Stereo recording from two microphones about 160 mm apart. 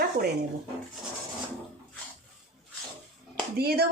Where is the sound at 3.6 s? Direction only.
75° right (ahead or behind).